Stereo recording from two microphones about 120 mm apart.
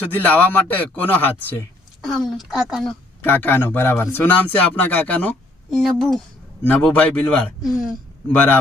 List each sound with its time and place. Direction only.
0.0 s a man's voice: 15° left (ahead or behind)
2.0 s speech: centre (ahead or behind)
3.2 s a man's voice: 15° left (ahead or behind)
5.7 s speech: centre (ahead or behind)
6.7 s a man's voice: 15° left (ahead or behind)
7.6 s speech: centre (ahead or behind)
8.3 s a man's voice: 15° left (ahead or behind)